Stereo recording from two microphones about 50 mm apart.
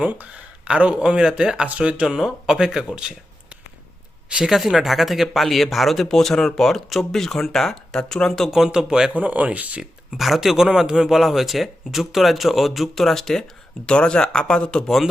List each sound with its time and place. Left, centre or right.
0.0 s speech: right
0.8 s speech: right
1.6 s speech: right
2.0 s speech: centre
4.4 s speech: centre
8.4 s speech: centre
9.1 s speech: right
9.8 s speech: centre
11.1 s speech: centre
13.8 s speech: centre